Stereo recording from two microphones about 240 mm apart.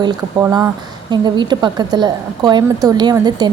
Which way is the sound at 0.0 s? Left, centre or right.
Centre.